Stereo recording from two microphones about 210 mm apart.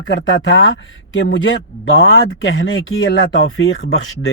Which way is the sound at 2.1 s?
70° left (ahead or behind).